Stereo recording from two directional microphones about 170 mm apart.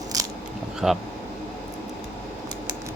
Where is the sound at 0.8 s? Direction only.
5° right (ahead or behind).